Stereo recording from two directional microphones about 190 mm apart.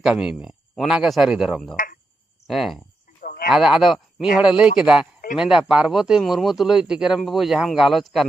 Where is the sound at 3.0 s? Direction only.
50° left (ahead or behind).